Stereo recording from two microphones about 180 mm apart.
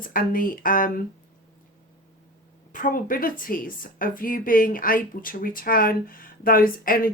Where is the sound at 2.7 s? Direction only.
50° left (ahead or behind).